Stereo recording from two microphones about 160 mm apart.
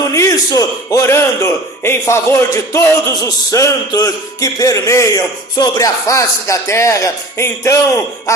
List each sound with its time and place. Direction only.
0.0 s a man's voice: 20° left (ahead or behind)